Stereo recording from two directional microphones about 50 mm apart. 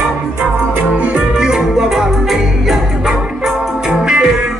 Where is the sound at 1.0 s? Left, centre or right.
Centre.